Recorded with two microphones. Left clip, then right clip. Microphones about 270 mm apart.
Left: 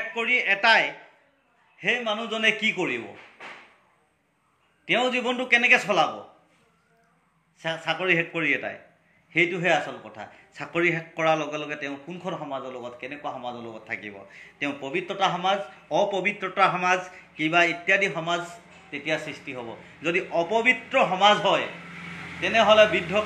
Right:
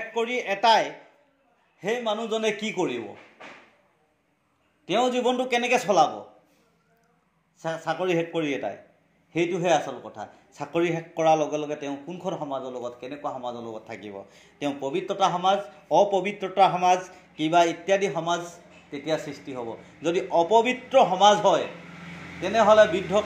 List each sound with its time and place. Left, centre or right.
0.1 s a man's voice: right
4.8 s a man's voice: right
7.8 s a man's voice: right
19.5 s a man's voice: centre